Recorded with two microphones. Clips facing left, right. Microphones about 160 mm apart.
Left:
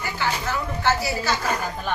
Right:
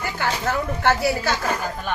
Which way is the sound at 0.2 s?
55° right (ahead or behind).